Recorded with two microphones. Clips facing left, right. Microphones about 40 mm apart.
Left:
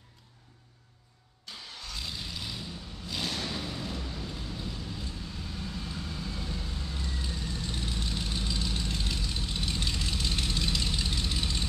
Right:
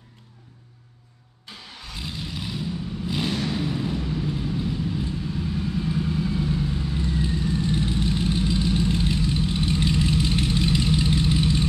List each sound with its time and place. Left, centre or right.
1.8 s vehicle: right